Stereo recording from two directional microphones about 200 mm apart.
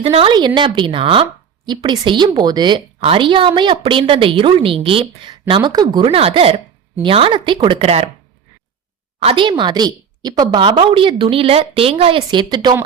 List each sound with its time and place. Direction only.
0.0 s speech: 30° right (ahead or behind)
9.2 s speech: 25° right (ahead or behind)